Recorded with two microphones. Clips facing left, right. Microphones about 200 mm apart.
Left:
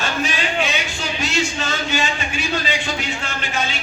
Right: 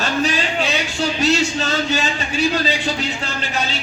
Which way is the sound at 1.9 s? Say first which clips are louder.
Right 2 dB; 35° right (ahead or behind).